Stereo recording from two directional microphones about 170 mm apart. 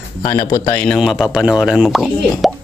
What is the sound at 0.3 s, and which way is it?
A man's voice, 20° left (ahead or behind).